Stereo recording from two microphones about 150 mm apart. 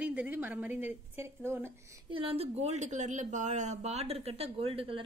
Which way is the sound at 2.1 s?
40° right (ahead or behind).